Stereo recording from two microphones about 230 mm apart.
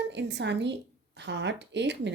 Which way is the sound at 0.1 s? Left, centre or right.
Right.